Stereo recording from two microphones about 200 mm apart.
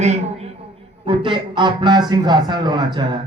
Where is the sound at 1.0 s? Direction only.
25° right (ahead or behind).